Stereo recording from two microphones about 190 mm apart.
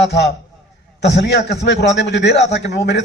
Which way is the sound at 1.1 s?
65° left (ahead or behind).